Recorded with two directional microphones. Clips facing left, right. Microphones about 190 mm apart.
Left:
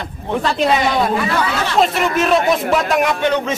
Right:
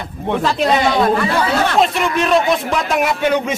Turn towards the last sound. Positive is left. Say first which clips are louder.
# even
turn(degrees=-5)  # may be behind; listen again after turning